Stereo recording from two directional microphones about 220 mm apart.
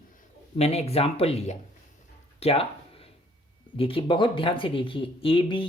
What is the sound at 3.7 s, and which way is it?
Speech, 25° left (ahead or behind).